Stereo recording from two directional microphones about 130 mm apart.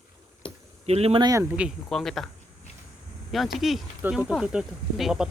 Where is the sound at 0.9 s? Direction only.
50° right (ahead or behind).